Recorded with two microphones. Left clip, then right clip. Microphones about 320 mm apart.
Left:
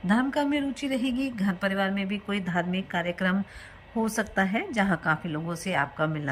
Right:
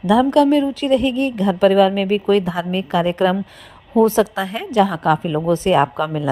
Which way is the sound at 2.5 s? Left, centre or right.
Centre.